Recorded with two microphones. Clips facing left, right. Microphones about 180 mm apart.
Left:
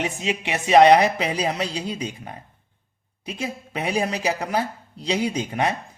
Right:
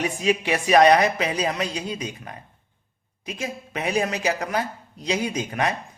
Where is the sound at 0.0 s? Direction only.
25° left (ahead or behind).